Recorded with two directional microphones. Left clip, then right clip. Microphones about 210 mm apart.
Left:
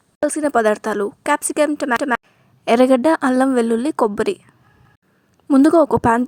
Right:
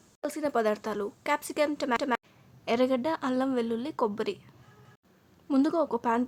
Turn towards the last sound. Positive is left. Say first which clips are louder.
# left 13 dB
turn(degrees=40)  # may be behind; listen again after turning